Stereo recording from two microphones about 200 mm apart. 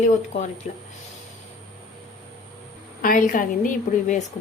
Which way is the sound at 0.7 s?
35° left (ahead or behind).